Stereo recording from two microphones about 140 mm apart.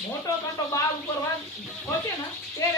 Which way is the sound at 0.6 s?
25° left (ahead or behind).